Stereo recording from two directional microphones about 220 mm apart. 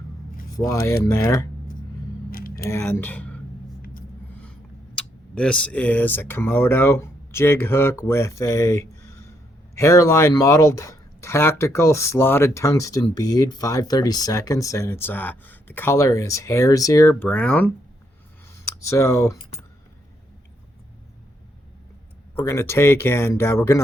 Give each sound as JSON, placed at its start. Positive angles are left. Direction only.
{"t": 0.5, "sound": "speech", "side_deg": 15}
{"t": 2.3, "sound": "a sound", "side_deg": 40}
{"t": 2.6, "sound": "speech", "side_deg": 10}
{"t": 4.9, "sound": "speech", "side_deg": 5}
{"t": 18.8, "sound": "speech", "side_deg": 15}
{"t": 22.4, "sound": "speech", "side_deg": 10}